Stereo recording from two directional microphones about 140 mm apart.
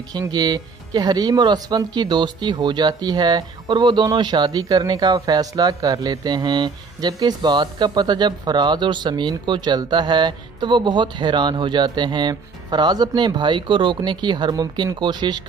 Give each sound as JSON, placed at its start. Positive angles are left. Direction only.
{"t": 0.1, "sound": "speech", "side_deg": -30}